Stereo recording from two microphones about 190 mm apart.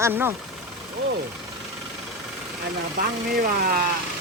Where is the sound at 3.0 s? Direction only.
50° right (ahead or behind).